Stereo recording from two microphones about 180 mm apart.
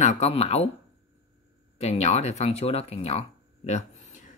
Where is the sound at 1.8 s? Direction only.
35° left (ahead or behind).